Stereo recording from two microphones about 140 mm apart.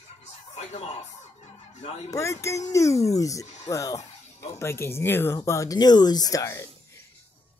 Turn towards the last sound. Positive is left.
turn(degrees=25)  # may be behind; listen again after turning